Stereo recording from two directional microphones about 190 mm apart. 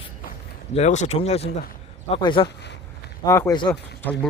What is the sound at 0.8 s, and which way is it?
A man's voice, 35° left (ahead or behind).